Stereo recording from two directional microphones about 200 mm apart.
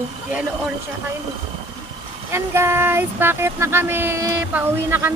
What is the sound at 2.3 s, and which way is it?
Speech, 10° right (ahead or behind).